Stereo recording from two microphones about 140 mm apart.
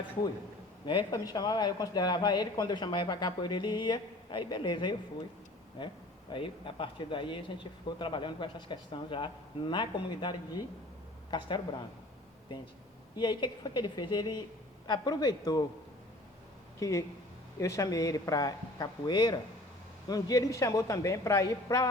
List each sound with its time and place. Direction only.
0.9 s speech: 30° left (ahead or behind)
13.1 s a woman's voice: 30° left (ahead or behind)
16.8 s a woman's voice: 25° left (ahead or behind)